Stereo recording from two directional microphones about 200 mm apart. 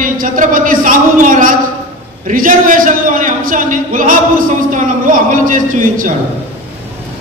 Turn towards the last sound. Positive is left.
turn(degrees=-40)  # may be behind; listen again after turning